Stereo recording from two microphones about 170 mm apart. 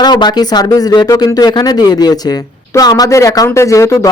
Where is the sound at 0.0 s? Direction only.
25° left (ahead or behind).